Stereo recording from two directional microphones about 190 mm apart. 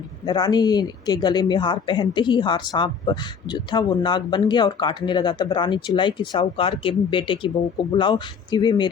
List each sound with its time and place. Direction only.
0.3 s speech: 20° left (ahead or behind)